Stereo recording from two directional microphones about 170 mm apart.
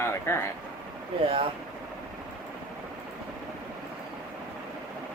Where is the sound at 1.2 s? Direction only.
35° right (ahead or behind).